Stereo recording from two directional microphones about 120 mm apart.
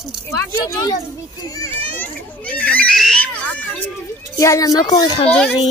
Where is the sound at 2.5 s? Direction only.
10° left (ahead or behind).